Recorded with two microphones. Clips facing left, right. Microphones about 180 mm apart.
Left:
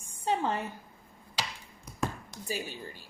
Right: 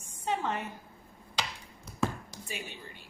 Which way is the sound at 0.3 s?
35° left (ahead or behind).